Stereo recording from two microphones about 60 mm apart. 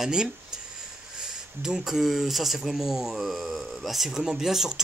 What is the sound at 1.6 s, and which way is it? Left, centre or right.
Speech, centre.